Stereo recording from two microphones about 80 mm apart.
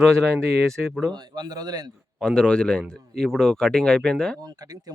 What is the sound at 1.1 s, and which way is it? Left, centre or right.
Speech, right.